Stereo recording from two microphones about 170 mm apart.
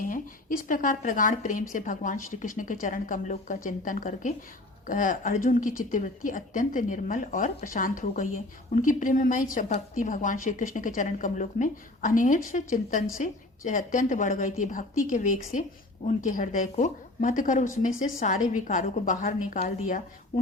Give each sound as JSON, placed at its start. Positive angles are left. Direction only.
{"t": 0.0, "sound": "a woman's voice", "side_deg": 55}